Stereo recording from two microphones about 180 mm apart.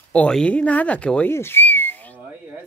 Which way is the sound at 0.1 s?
5° left (ahead or behind).